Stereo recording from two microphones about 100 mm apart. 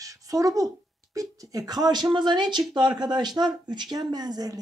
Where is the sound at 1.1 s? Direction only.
35° right (ahead or behind).